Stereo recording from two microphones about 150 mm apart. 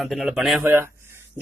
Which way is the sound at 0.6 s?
15° right (ahead or behind).